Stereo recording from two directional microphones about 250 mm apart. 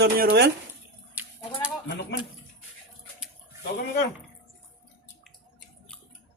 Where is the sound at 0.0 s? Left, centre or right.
Right.